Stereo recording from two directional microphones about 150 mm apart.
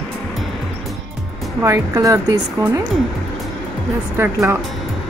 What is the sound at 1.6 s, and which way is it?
Speech, 20° right (ahead or behind).